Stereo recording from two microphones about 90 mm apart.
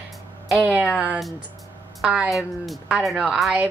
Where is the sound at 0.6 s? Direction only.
15° right (ahead or behind).